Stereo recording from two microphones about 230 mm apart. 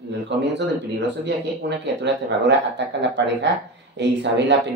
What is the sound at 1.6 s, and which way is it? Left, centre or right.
Speech, right.